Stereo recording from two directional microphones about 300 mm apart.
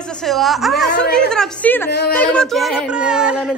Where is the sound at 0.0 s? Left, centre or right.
Centre.